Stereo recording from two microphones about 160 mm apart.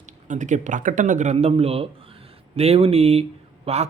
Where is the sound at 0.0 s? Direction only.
50° right (ahead or behind).